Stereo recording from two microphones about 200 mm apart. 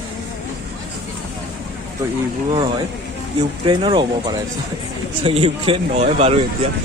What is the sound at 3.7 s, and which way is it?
A man's voice, 25° right (ahead or behind).